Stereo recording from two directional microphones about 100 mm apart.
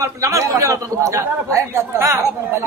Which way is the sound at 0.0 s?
30° right (ahead or behind).